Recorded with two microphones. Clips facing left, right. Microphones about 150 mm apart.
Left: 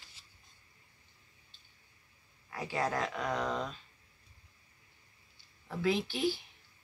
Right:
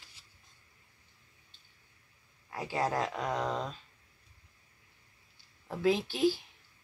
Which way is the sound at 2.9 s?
30° right (ahead or behind).